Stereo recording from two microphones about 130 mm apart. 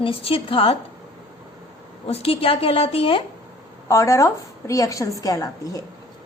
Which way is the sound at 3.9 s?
20° left (ahead or behind).